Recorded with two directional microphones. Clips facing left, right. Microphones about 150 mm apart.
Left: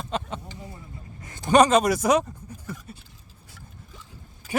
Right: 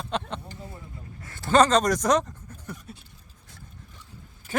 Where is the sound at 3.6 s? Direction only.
90° left.